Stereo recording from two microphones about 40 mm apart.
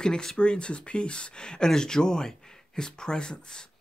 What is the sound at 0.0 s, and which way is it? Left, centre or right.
Speech, centre.